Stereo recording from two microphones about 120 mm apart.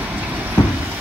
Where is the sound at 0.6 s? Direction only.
35° left (ahead or behind).